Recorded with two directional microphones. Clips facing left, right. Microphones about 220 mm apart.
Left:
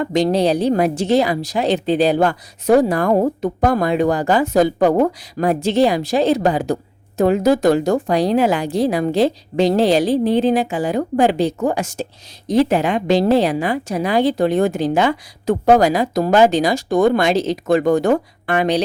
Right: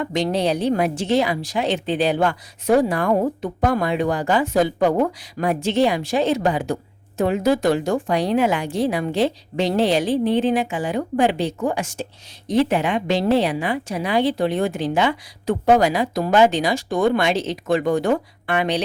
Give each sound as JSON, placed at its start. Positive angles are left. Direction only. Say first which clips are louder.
{"t": 0.0, "sound": "a woman's voice", "louder": "left 5 dB", "side_deg": 35}